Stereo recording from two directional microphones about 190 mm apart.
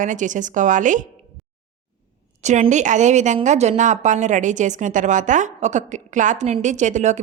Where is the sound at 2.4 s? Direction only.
35° right (ahead or behind).